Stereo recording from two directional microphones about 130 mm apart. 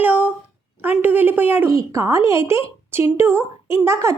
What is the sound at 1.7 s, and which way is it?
A woman's voice, 25° right (ahead or behind).